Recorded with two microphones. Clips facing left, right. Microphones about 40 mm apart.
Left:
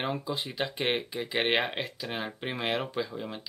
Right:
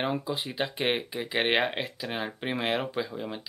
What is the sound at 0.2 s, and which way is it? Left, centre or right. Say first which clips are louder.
Speech: right 1 dB; centre.